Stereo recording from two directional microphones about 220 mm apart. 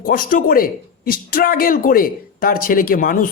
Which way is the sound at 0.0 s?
40° left (ahead or behind).